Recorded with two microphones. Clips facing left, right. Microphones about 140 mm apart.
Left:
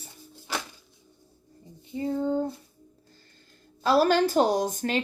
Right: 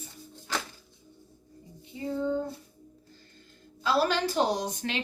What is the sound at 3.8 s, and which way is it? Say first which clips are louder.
Speech: left 5 dB; 45° left (ahead or behind).